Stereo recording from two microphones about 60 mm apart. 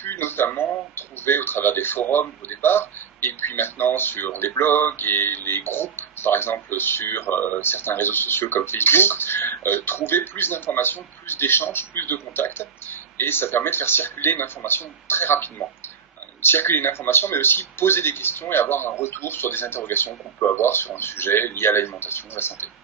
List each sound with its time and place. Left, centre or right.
0.0 s speech: left